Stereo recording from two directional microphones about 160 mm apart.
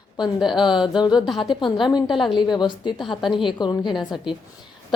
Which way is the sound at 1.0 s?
30° left (ahead or behind).